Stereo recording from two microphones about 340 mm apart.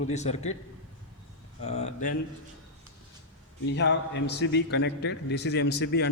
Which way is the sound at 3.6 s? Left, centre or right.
Left.